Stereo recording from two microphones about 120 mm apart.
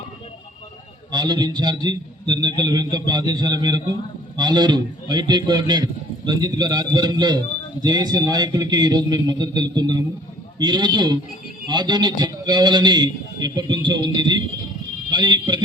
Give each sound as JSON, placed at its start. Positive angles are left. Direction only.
{"t": 1.1, "sound": "a man's voice", "side_deg": -35}